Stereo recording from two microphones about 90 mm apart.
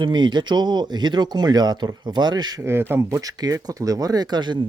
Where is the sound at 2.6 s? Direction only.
25° right (ahead or behind).